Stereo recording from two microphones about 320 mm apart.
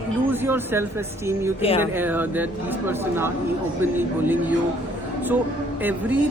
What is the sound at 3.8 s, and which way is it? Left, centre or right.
Speech, centre.